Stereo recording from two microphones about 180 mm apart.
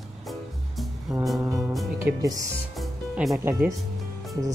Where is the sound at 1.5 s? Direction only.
Centre (ahead or behind).